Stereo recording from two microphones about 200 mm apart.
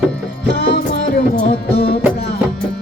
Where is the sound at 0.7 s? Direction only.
50° left (ahead or behind).